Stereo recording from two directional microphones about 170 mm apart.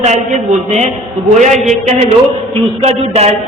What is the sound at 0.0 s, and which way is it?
Speech, 40° right (ahead or behind).